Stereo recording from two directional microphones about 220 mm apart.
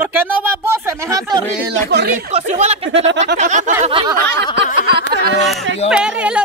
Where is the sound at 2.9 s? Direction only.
55° right (ahead or behind).